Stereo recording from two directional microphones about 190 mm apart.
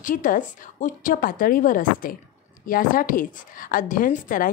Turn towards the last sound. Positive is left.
turn(degrees=45)  # may be behind; listen again after turning